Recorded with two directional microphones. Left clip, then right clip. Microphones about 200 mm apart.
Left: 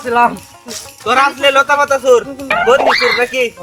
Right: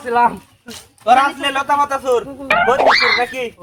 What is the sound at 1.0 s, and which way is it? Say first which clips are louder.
Speech: left 2 dB; 20° right (ahead or behind).